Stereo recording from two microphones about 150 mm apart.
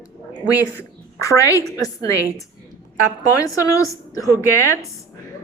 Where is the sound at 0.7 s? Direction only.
20° left (ahead or behind).